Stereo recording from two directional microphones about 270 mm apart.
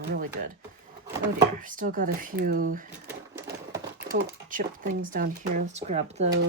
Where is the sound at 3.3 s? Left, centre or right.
Centre.